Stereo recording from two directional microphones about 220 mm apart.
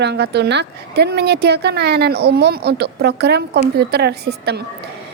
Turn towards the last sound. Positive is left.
turn(degrees=-50)  # may be behind; listen again after turning